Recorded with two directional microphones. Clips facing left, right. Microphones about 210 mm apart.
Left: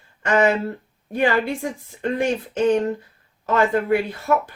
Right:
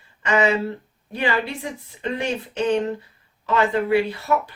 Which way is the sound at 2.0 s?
50° left (ahead or behind).